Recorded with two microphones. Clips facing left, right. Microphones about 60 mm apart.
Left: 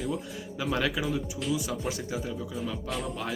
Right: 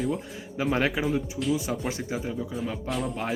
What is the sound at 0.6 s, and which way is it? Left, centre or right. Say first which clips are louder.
Speech: right 4 dB; right.